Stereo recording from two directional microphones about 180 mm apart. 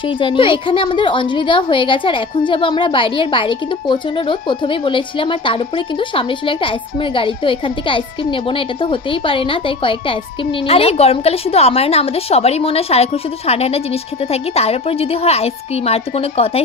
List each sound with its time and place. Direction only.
0.2 s a woman's voice: 30° left (ahead or behind)